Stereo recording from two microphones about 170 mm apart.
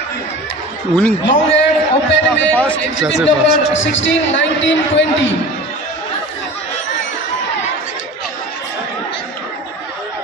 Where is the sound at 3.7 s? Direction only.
90° left.